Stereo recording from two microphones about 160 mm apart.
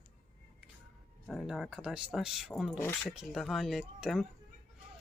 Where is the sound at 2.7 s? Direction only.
15° left (ahead or behind).